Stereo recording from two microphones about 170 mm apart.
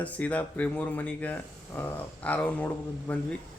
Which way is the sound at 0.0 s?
10° left (ahead or behind).